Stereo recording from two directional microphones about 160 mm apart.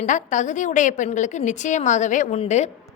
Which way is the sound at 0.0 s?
50° left (ahead or behind).